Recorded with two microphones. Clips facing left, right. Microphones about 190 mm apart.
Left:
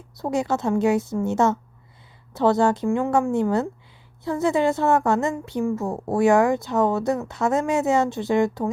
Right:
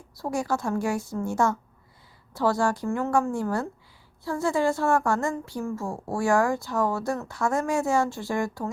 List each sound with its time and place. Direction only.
0.2 s speech: 20° left (ahead or behind)